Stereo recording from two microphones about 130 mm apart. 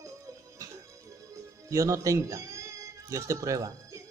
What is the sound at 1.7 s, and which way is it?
Speech, 25° right (ahead or behind).